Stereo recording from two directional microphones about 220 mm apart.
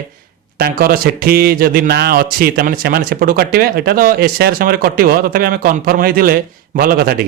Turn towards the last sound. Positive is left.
turn(degrees=-45)  # may be behind; listen again after turning